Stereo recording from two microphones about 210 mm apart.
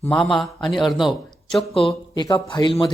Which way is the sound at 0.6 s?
20° left (ahead or behind).